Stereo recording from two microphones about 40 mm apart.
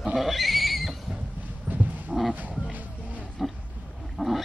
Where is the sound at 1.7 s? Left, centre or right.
Right.